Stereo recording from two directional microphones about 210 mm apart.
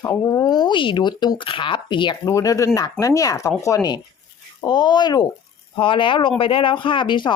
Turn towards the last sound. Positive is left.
turn(degrees=20)  # may be behind; listen again after turning